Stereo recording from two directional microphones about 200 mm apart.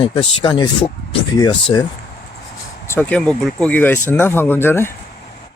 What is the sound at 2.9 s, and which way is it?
Speech, 10° left (ahead or behind).